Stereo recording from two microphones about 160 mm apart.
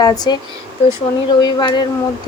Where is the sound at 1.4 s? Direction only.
30° left (ahead or behind).